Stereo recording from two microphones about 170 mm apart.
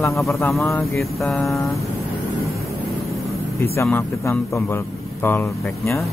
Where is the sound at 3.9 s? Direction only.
15° left (ahead or behind).